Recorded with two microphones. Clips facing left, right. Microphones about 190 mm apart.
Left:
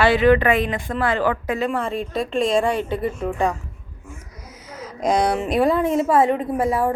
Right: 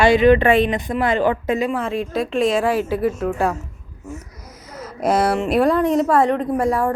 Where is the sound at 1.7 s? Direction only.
Centre (ahead or behind).